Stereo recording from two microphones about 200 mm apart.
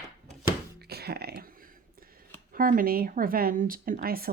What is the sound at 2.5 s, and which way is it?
A woman's voice, 45° right (ahead or behind).